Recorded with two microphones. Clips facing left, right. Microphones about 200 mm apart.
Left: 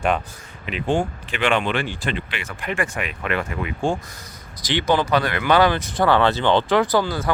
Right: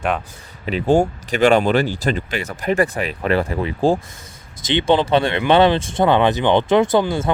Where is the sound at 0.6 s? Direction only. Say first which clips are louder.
Right 6 dB; 35° right (ahead or behind).